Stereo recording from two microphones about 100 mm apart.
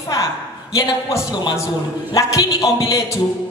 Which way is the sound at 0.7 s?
35° left (ahead or behind).